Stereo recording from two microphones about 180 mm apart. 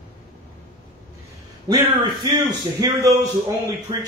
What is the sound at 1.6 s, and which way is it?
Speech, 25° right (ahead or behind).